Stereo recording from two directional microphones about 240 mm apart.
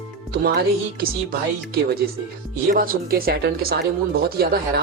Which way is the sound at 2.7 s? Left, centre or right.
Right.